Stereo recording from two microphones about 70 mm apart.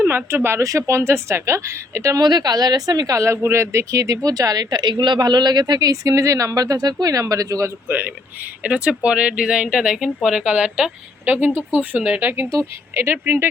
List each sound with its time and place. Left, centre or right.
0.0 s a sound: right
0.3 s speech: right
0.6 s a woman's voice: right
2.2 s speech: right
3.2 s speech: right
7.9 s speech: right
11.3 s speech: right
12.9 s speech: right